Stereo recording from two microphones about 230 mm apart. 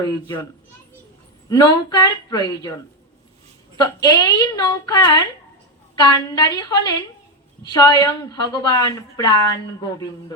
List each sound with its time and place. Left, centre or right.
1.5 s a woman's voice: centre
3.8 s a woman's voice: centre